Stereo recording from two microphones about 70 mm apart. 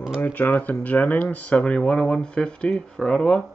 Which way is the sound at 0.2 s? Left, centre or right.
Left.